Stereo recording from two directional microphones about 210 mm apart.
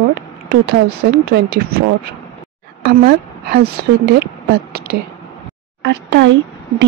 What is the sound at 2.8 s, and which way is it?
Speech, 50° right (ahead or behind).